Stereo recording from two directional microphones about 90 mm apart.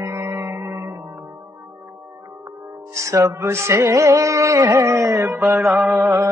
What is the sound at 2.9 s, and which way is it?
Music, 35° right (ahead or behind).